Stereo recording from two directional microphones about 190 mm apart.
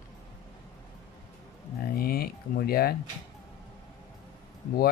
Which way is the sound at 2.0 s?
55° left (ahead or behind).